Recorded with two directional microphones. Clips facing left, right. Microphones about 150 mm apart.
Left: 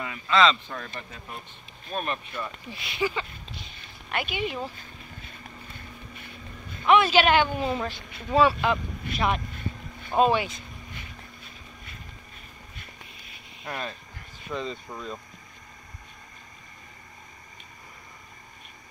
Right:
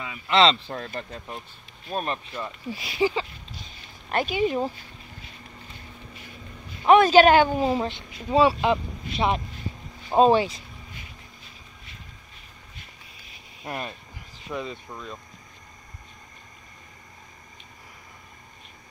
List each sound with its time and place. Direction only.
0.3 s speech: 30° right (ahead or behind)
6.9 s speech: 40° right (ahead or behind)
9.5 s boat: 55° left (ahead or behind)
10.1 s speech: 30° right (ahead or behind)
14.5 s speech: 10° right (ahead or behind)